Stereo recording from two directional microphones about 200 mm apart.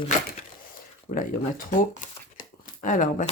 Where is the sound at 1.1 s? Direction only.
45° left (ahead or behind).